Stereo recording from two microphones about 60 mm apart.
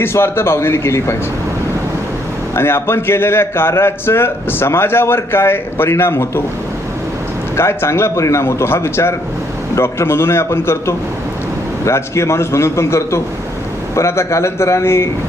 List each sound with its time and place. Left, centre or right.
0.0 s a man's voice: left
2.6 s a man's voice: left
7.5 s a man's voice: left